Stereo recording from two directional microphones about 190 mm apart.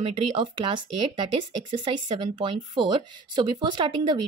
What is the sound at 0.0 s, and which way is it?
Speech, 25° right (ahead or behind).